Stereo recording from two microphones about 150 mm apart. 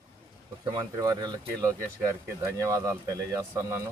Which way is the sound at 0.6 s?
25° right (ahead or behind).